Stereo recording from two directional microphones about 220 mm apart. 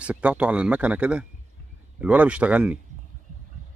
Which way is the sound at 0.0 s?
5° right (ahead or behind).